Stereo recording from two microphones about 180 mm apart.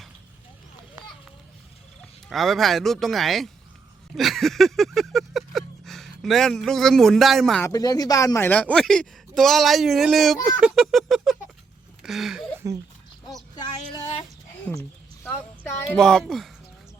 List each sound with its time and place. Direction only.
2.3 s speech: centre (ahead or behind)
4.2 s a sound: centre (ahead or behind)
7.6 s speech: 20° left (ahead or behind); by 10.3 s centre (ahead or behind)
10.8 s a sound: centre (ahead or behind)
15.2 s speech: 10° left (ahead or behind)
16.0 s speech: centre (ahead or behind)